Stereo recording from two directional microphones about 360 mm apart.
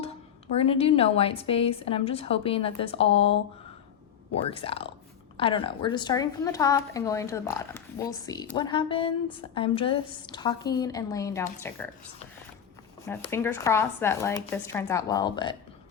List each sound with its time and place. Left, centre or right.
0.0 s a woman's voice: centre
4.4 s a woman's voice: centre
13.1 s a woman's voice: centre